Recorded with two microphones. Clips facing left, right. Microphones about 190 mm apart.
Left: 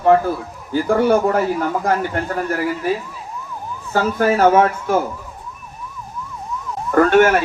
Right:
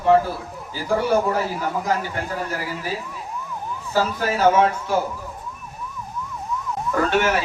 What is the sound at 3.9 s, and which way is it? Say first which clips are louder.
Speech: left 5 dB; 55° left (ahead or behind).